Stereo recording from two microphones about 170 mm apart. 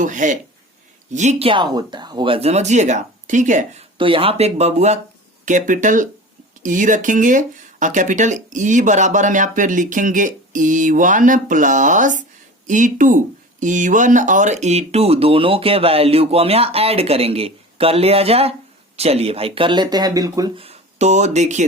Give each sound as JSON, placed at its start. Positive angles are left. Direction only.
{"t": 0.0, "sound": "speech", "side_deg": -50}
{"t": 3.9, "sound": "speech", "side_deg": -30}
{"t": 20.6, "sound": "speech", "side_deg": -40}